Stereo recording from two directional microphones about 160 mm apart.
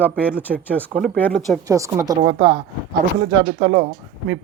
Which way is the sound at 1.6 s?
20° right (ahead or behind).